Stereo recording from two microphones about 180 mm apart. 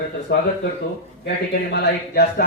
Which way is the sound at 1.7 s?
65° left (ahead or behind).